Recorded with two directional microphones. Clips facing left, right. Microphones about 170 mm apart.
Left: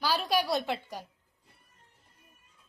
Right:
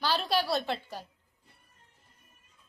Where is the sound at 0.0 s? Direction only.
10° left (ahead or behind).